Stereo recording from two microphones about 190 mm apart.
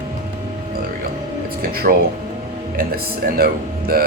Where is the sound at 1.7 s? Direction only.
55° right (ahead or behind).